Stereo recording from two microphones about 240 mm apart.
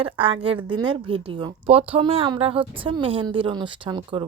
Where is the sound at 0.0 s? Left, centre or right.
Right.